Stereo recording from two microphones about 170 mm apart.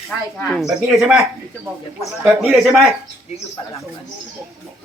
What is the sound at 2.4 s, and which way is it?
Speech, centre (ahead or behind).